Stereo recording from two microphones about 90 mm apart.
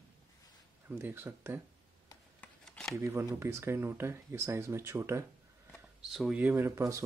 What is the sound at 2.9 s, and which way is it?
Speech, 30° right (ahead or behind).